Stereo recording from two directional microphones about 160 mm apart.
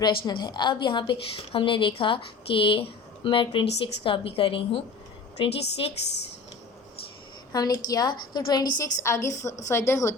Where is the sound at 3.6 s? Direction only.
90° left.